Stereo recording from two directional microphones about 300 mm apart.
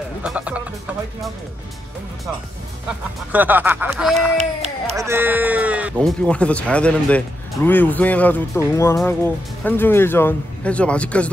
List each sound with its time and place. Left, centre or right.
0.2 s speech: centre
3.3 s speech: centre
4.4 s speech: right
4.9 s speech: centre